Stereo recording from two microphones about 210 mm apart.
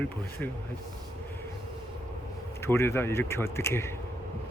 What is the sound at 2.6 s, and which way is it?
Speech, 10° left (ahead or behind).